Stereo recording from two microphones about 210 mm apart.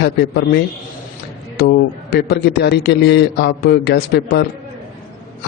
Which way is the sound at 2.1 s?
50° left (ahead or behind).